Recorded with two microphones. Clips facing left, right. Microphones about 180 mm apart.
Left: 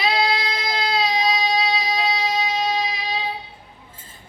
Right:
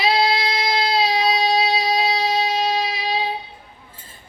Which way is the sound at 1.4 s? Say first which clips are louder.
Right 3 dB; 30° right (ahead or behind).